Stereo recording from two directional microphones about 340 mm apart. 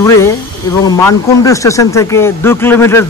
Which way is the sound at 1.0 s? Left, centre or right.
Centre.